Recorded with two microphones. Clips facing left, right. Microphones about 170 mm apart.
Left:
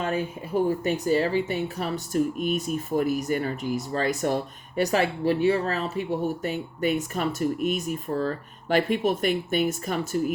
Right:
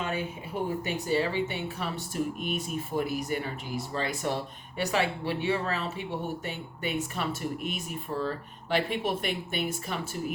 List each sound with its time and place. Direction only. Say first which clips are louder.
0.0 s speech: left 5 dB; 45° left (ahead or behind)